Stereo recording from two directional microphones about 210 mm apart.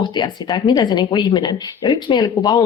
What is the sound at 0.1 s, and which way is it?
Speech, 20° left (ahead or behind).